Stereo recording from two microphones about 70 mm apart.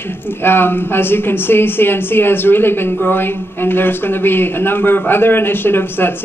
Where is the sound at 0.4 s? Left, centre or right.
Left.